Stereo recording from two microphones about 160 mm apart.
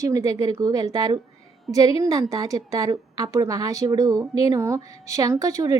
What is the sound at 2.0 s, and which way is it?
Speech, 20° right (ahead or behind).